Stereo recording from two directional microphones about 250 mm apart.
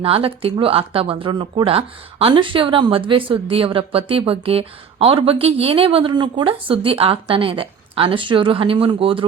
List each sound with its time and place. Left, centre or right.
0.0 s speech: right